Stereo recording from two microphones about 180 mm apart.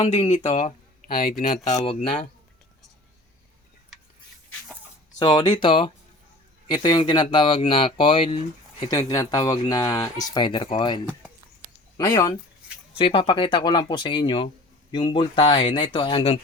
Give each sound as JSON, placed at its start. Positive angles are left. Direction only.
{"t": 0.0, "sound": "speech", "side_deg": 30}
{"t": 1.0, "sound": "speech", "side_deg": 50}
{"t": 1.7, "sound": "speech", "side_deg": 30}
{"t": 5.2, "sound": "speech", "side_deg": 25}